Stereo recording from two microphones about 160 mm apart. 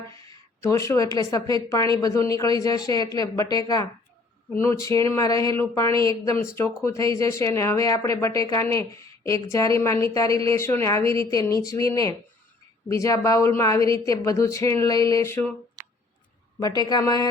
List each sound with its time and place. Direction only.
0.3 s a woman's voice: 20° left (ahead or behind)
16.6 s a woman's voice: 25° left (ahead or behind)